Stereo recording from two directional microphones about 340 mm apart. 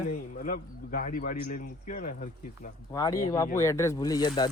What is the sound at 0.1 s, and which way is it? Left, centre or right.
A man's voice, left.